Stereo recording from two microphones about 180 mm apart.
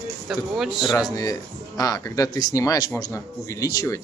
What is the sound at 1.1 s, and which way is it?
Speech, 20° left (ahead or behind).